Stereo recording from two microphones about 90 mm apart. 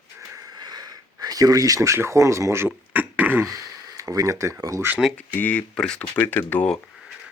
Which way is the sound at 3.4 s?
40° right (ahead or behind).